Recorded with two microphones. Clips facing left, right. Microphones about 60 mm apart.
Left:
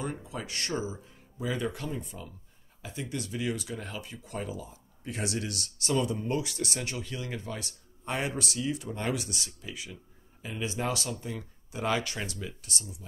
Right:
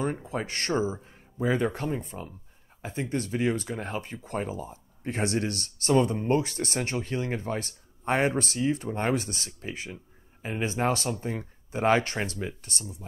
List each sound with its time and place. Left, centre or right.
0.0 s speech: right